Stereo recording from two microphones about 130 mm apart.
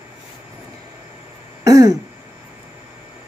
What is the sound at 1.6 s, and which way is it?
Throat clearing, 25° right (ahead or behind).